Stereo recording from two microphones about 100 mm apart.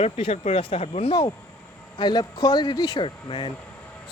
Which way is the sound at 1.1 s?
45° left (ahead or behind).